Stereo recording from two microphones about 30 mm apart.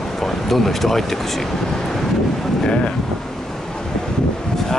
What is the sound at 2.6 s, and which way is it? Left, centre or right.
Speech, left.